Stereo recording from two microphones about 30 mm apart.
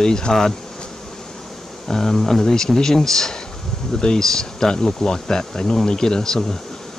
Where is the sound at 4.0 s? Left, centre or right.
Left.